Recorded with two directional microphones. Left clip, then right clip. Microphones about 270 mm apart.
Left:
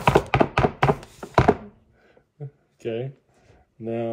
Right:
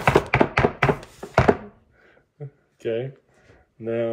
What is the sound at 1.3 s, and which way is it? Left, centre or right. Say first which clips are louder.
Thunk: even; centre.